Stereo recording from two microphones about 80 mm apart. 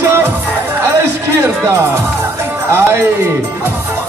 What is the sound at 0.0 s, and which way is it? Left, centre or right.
Music, right.